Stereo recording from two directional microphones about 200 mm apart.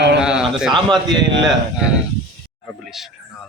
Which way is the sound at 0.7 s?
20° right (ahead or behind).